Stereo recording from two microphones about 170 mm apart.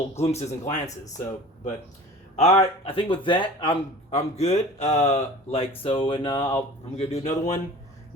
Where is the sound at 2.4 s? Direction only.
40° left (ahead or behind).